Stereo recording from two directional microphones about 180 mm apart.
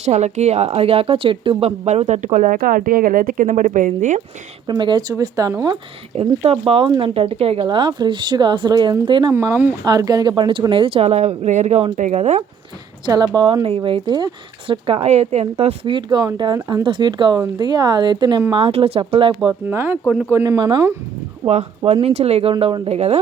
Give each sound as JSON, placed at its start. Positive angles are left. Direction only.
{"t": 0.0, "sound": "a woman's voice", "side_deg": -40}
{"t": 4.6, "sound": "a woman's voice", "side_deg": -25}
{"t": 6.1, "sound": "a woman's voice", "side_deg": -35}
{"t": 9.3, "sound": "a woman's voice", "side_deg": -15}
{"t": 13.1, "sound": "a woman's voice", "side_deg": -25}
{"t": 19.6, "sound": "a woman's voice", "side_deg": -10}
{"t": 21.4, "sound": "a woman's voice", "side_deg": -35}